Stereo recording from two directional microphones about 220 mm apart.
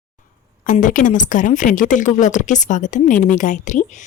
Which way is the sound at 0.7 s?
35° left (ahead or behind).